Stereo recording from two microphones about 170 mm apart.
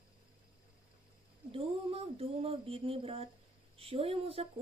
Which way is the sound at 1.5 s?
35° right (ahead or behind).